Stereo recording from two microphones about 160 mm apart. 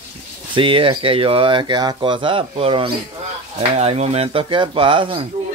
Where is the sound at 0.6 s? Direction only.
35° right (ahead or behind).